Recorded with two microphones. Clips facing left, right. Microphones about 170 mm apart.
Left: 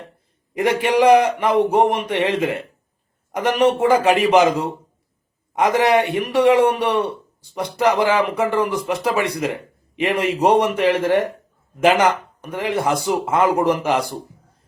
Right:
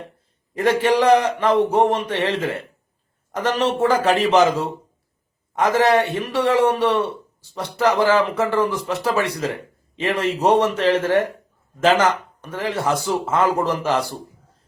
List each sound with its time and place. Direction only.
0.5 s speech: 15° left (ahead or behind)